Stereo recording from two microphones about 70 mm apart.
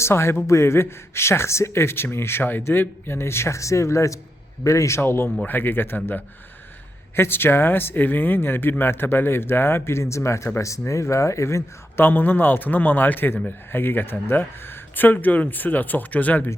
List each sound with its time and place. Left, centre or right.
0.0 s speech: left
7.2 s speech: left